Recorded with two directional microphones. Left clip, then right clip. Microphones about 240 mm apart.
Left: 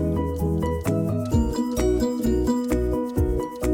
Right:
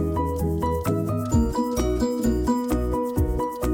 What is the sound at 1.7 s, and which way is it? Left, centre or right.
Music, centre.